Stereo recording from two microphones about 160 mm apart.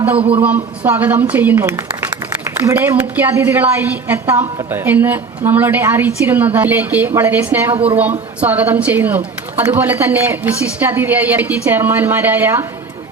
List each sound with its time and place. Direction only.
0.2 s a man's voice: 35° right (ahead or behind)
0.9 s a woman's voice: 10° right (ahead or behind)